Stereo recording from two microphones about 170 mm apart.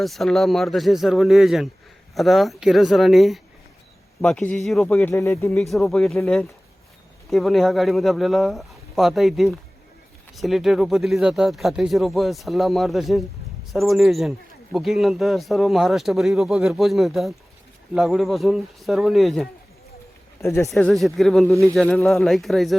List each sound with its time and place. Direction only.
0.0 s speech: centre (ahead or behind)
5.5 s speech: centre (ahead or behind)
20.4 s speech: 15° left (ahead or behind)
20.7 s speech: centre (ahead or behind)